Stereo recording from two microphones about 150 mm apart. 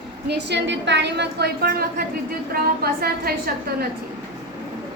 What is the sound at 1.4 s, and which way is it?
A woman's voice, 90° right.